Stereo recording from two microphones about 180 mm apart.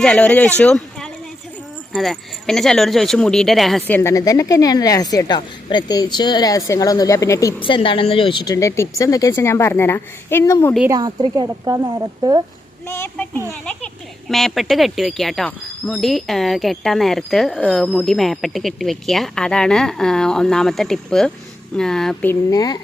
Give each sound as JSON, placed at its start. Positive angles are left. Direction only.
{"t": 0.0, "sound": "speech", "side_deg": 5}
{"t": 7.6, "sound": "speech", "side_deg": 30}
{"t": 10.9, "sound": "a woman's voice", "side_deg": -25}
{"t": 12.9, "sound": "speech", "side_deg": 10}